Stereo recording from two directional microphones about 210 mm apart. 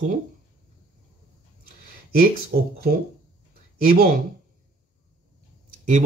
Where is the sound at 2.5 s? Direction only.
45° right (ahead or behind).